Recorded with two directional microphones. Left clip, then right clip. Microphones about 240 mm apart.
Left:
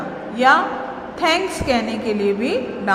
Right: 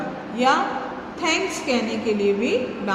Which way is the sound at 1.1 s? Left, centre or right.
Centre.